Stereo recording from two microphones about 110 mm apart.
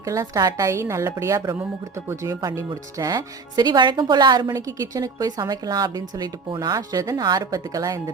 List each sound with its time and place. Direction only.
0.0 s a woman's voice: 30° right (ahead or behind)